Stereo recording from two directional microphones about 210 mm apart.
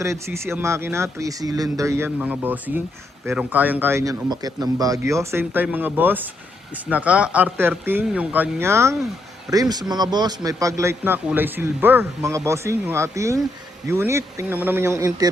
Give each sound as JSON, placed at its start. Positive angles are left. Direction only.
{"t": 0.0, "sound": "a man's voice", "side_deg": -15}